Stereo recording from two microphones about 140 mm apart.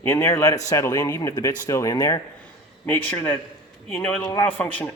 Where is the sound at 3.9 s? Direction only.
10° left (ahead or behind).